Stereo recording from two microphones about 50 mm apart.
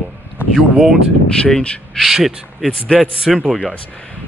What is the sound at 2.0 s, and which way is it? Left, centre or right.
Speech, centre.